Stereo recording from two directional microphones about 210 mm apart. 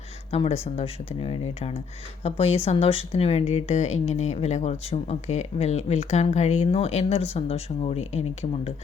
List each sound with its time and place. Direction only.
0.3 s speech: 30° left (ahead or behind)